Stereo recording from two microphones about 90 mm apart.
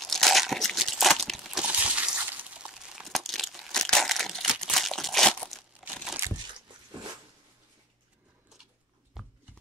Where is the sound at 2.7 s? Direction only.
5° right (ahead or behind).